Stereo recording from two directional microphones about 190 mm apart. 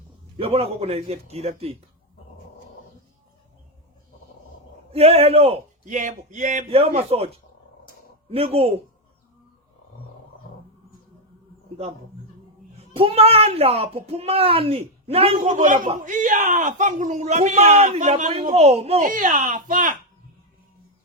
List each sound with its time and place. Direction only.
0.3 s speech: 30° right (ahead or behind)
4.9 s speech: 30° right (ahead or behind)
8.3 s speech: 30° right (ahead or behind)
12.8 s speech: 30° right (ahead or behind)
19.0 s speech: 45° right (ahead or behind)